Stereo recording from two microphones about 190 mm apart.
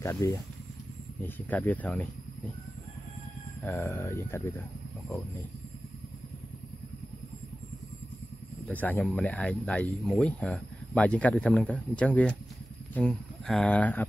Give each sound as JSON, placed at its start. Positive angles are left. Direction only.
{"t": 0.0, "sound": "speech", "side_deg": 15}
{"t": 3.6, "sound": "speech", "side_deg": 10}
{"t": 8.6, "sound": "speech", "side_deg": 10}